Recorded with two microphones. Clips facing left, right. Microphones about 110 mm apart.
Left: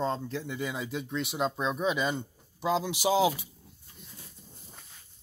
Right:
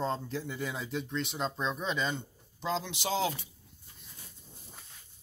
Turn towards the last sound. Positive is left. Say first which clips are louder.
# left 6 dB
turn(degrees=10)  # may be behind; listen again after turning